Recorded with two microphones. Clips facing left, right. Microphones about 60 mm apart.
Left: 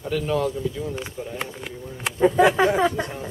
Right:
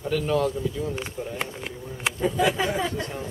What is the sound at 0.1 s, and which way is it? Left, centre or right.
Speech, centre.